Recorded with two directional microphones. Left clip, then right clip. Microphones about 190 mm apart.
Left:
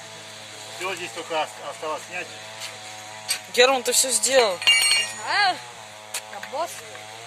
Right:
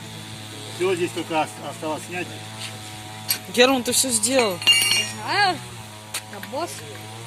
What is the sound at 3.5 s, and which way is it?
Speech, 10° left (ahead or behind).